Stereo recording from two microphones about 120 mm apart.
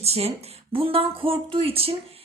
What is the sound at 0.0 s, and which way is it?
Speech, 55° right (ahead or behind).